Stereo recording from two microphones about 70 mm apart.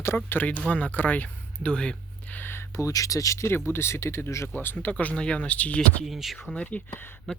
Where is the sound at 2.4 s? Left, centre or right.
Left.